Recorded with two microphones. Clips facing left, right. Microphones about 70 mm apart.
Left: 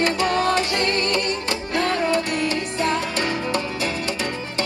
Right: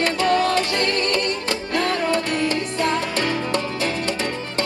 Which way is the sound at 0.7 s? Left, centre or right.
Right.